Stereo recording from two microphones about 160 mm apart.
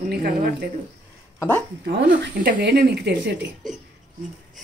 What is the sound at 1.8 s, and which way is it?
Speech, 75° right (ahead or behind).